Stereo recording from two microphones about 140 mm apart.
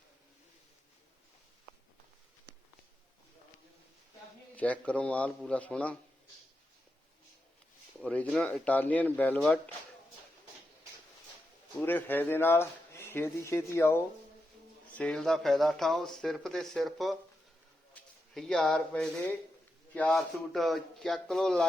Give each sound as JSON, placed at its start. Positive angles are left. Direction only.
{"t": 4.5, "sound": "a man's voice", "side_deg": 10}
{"t": 8.0, "sound": "speech", "side_deg": 10}
{"t": 11.8, "sound": "speech", "side_deg": 15}
{"t": 14.9, "sound": "speech", "side_deg": 5}